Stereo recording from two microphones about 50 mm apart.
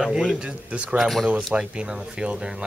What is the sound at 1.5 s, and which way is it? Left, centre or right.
Speech, centre.